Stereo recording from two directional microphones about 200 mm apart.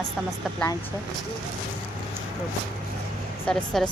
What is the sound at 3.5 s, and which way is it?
Speech, 5° left (ahead or behind).